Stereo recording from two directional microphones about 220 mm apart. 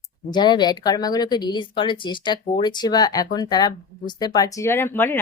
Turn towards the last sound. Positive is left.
turn(degrees=10)  # may be behind; listen again after turning